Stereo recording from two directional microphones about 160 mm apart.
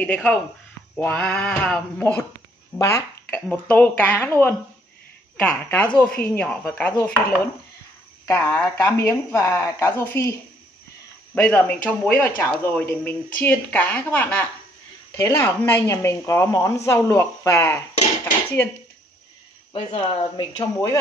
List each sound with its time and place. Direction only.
0.0 s speech: 10° left (ahead or behind)
11.3 s speech: 5° left (ahead or behind)
19.7 s speech: 40° left (ahead or behind)